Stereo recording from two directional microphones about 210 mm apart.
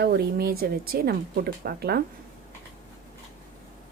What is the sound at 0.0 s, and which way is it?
Speech, 50° right (ahead or behind).